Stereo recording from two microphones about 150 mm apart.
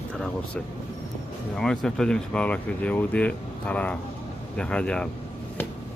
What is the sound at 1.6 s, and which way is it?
Speech, 5° left (ahead or behind).